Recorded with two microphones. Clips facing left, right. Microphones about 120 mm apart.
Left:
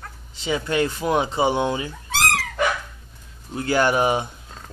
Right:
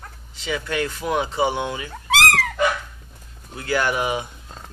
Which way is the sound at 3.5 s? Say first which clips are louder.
Left 3 dB; 30° left (ahead or behind).